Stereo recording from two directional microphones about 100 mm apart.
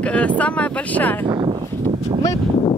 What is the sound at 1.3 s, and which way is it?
Speech, 50° right (ahead or behind).